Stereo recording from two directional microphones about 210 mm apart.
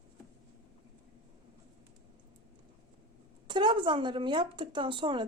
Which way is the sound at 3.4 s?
20° right (ahead or behind).